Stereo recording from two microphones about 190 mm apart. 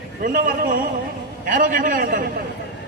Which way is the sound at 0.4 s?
50° right (ahead or behind).